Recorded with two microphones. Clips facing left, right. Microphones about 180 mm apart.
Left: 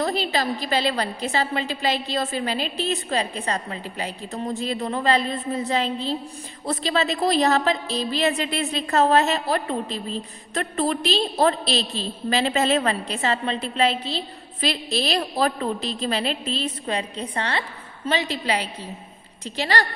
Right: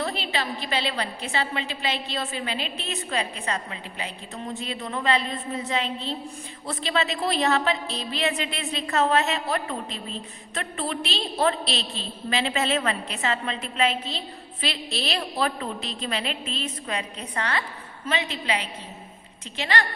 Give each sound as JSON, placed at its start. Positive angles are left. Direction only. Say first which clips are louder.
{"t": 0.0, "sound": "a woman's voice", "louder": "left 5 dB", "side_deg": 40}